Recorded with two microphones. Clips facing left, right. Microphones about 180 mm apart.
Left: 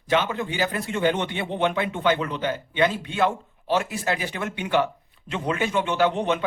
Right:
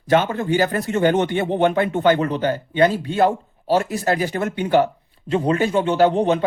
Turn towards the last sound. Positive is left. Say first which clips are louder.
# right 6 dB
turn(degrees=-40)  # may be behind; listen again after turning